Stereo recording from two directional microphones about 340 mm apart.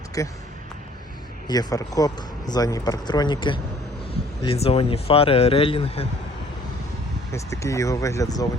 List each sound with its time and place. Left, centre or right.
0.2 s speech: centre
1.5 s speech: centre
7.3 s speech: centre